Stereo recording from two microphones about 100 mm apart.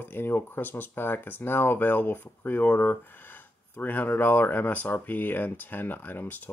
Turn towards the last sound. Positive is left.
turn(degrees=20)  # may be behind; listen again after turning